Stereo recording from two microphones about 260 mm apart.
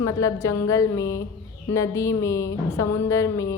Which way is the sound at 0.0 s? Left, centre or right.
Centre.